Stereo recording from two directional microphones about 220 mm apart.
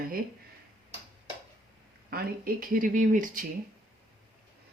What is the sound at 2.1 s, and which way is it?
Speech, 40° right (ahead or behind).